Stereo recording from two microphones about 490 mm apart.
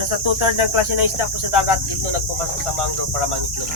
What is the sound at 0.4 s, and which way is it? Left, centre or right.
Speech, right.